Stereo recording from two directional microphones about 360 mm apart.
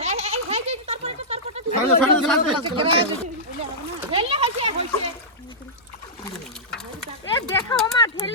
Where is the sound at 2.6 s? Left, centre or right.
Centre.